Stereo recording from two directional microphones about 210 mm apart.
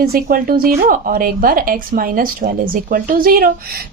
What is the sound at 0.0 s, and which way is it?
A woman's voice, 45° right (ahead or behind).